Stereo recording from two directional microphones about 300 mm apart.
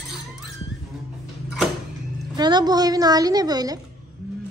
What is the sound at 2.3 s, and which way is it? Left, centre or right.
A woman's voice, centre.